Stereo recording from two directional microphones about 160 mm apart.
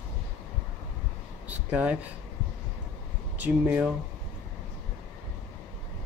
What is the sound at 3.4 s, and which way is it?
Speech, 10° right (ahead or behind).